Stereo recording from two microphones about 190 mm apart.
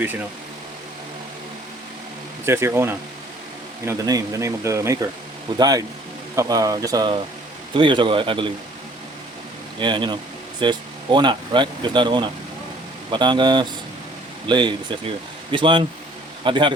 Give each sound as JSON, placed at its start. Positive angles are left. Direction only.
{"t": 2.5, "sound": "speech", "side_deg": -15}
{"t": 9.7, "sound": "speech", "side_deg": -25}